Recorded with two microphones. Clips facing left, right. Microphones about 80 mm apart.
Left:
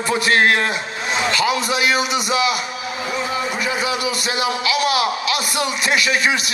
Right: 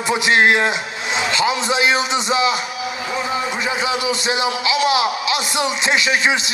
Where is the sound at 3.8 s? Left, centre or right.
Right.